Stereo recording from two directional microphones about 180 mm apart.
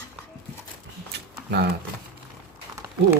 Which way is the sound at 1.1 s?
70° right (ahead or behind).